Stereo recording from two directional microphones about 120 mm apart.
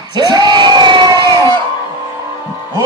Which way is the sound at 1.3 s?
25° left (ahead or behind).